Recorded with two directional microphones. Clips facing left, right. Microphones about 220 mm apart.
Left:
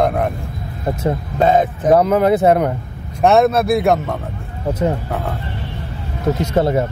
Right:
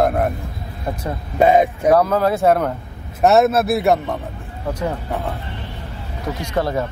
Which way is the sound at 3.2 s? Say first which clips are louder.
Left 1 dB; 5° right (ahead or behind).